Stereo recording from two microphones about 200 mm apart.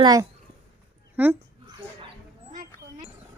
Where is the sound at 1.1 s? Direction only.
10° right (ahead or behind).